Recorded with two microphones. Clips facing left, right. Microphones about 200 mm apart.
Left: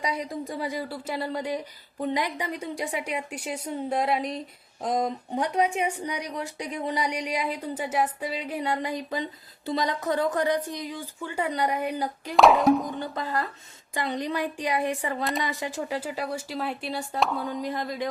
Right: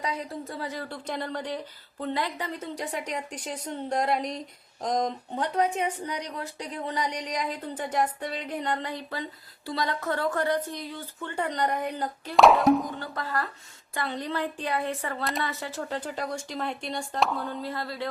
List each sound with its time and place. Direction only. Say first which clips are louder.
0.0 s speech: left 2 dB; 15° left (ahead or behind)
12.4 s a sound: even; centre (ahead or behind)
13.0 s speech: left 2 dB; 20° left (ahead or behind)
15.2 s a sound: left 1 dB; centre (ahead or behind)
15.4 s speech: left 3 dB; 15° left (ahead or behind)
17.4 s speech: left 3 dB; 15° left (ahead or behind)